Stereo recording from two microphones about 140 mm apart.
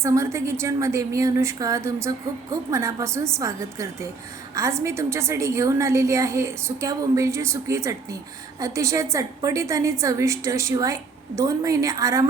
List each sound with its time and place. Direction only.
0.0 s a woman's voice: 20° right (ahead or behind)